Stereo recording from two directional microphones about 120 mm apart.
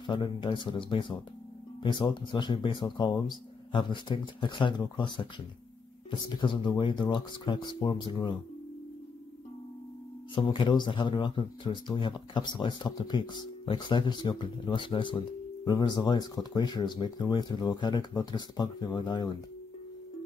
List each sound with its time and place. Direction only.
0.0 s speech: 40° left (ahead or behind)
10.3 s speech: 40° left (ahead or behind)